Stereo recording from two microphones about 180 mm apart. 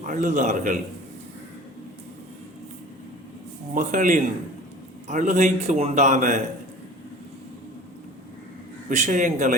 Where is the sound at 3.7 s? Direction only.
45° right (ahead or behind).